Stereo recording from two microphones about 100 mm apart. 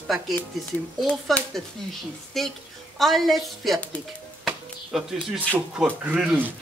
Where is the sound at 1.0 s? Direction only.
5° left (ahead or behind).